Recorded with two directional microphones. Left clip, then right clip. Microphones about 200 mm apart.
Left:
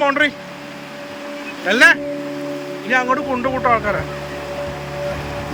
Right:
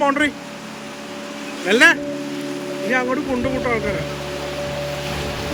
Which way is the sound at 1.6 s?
15° right (ahead or behind).